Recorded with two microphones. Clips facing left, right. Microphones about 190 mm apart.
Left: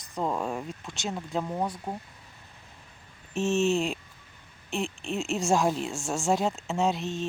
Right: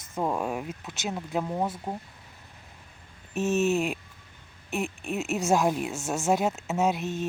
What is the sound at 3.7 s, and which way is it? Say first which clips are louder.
Speech: right 1 dB; 5° right (ahead or behind).